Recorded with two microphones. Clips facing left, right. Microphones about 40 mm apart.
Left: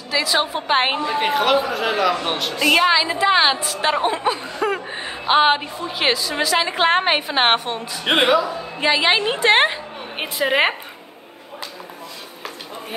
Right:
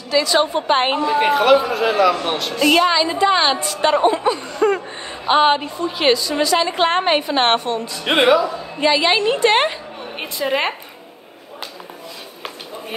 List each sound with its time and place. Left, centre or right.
0.1 s a woman's voice: centre
2.6 s a woman's voice: centre
2.9 s a woman's voice: centre
4.8 s a sound: left
5.2 s a man's voice: centre